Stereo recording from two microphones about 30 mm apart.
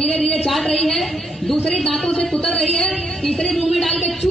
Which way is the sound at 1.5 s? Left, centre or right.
Left.